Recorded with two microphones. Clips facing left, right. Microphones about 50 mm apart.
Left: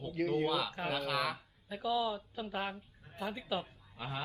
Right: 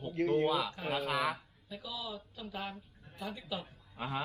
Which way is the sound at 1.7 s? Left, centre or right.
Left.